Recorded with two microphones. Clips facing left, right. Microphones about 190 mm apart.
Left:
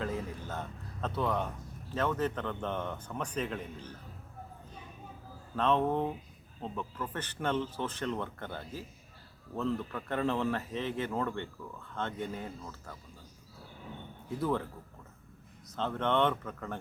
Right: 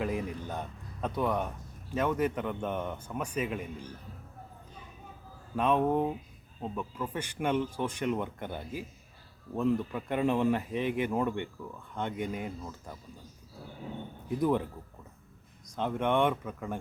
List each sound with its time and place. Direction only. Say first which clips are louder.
0.0 s a man's voice: right 3 dB; 15° right (ahead or behind)
5.5 s a man's voice: right 2 dB; 10° right (ahead or behind)
14.3 s a man's voice: right 4 dB; 15° right (ahead or behind)